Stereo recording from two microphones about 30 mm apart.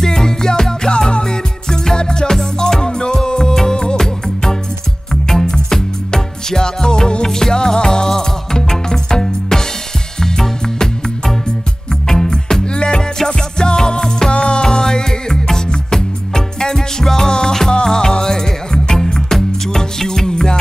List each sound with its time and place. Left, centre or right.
0.0 s music: left
5.1 s music: centre
12.7 s music: left
17.0 s music: centre